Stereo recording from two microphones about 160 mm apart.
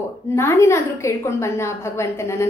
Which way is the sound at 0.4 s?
15° left (ahead or behind).